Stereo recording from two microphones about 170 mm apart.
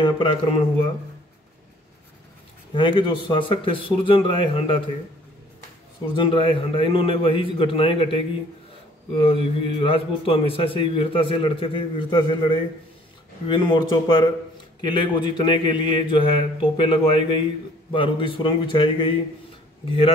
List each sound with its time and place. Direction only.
0.0 s a man's voice: 30° left (ahead or behind)
2.7 s a man's voice: 30° left (ahead or behind)
6.1 s a man's voice: 30° left (ahead or behind)